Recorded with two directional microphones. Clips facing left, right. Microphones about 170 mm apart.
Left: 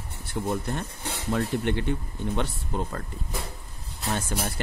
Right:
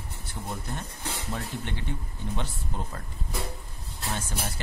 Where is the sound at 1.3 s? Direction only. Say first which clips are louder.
Left 12 dB; 60° left (ahead or behind).